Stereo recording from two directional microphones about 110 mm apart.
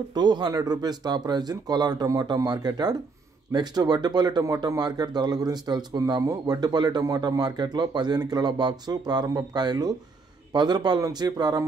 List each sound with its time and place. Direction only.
0.1 s speech: 40° right (ahead or behind)